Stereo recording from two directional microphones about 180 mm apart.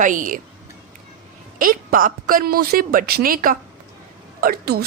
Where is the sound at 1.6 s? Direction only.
50° right (ahead or behind).